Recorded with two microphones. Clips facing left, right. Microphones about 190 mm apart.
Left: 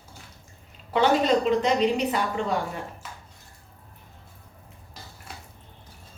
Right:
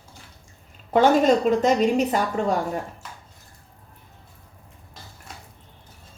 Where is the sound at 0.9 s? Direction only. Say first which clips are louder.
Right 4 dB; 45° right (ahead or behind).